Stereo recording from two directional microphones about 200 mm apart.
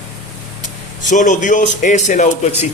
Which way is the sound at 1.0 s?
40° left (ahead or behind).